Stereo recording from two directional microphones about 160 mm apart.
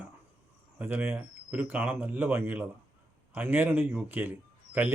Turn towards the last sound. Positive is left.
turn(degrees=-10)  # may be behind; listen again after turning